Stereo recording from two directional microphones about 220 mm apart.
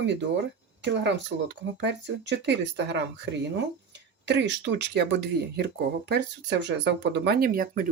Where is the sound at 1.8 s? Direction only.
55° right (ahead or behind).